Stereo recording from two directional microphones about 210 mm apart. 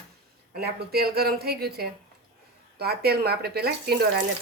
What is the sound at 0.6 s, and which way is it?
A woman's voice, 50° right (ahead or behind).